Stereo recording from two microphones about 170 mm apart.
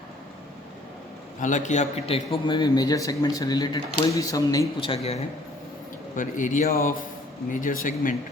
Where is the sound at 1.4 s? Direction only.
45° left (ahead or behind); by 4.6 s 20° left (ahead or behind).